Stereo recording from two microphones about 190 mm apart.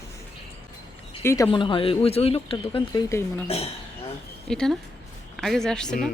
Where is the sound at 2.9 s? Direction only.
15° left (ahead or behind).